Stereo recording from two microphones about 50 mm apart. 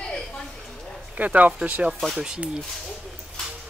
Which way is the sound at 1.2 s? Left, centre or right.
Right.